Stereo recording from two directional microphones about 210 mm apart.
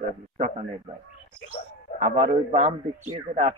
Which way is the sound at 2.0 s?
30° right (ahead or behind).